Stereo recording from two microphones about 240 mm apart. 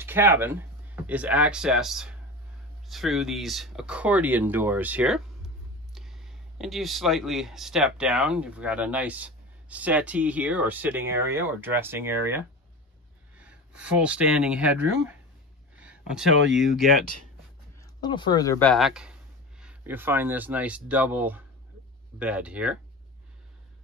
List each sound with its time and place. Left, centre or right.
0.0 s speech: centre
15.7 s a sound: centre
16.5 s speech: centre
17.7 s speech: centre
18.7 s speech: centre